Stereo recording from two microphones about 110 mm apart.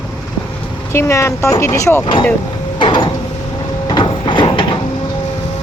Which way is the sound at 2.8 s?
45° left (ahead or behind).